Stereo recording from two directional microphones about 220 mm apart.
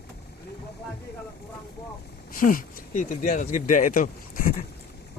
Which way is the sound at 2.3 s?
40° left (ahead or behind).